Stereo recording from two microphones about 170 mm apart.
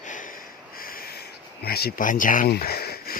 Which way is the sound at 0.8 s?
60° left (ahead or behind).